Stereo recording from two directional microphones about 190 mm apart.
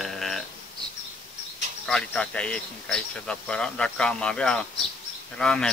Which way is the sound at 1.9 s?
5° left (ahead or behind).